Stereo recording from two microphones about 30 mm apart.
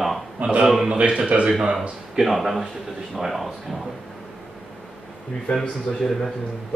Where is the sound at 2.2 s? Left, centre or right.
Centre.